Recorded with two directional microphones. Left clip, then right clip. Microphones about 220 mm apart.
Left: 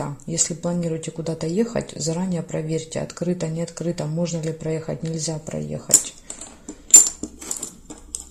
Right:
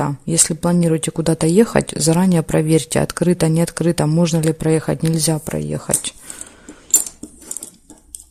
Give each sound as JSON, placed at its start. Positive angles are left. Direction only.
{"t": 0.0, "sound": "speech", "side_deg": -45}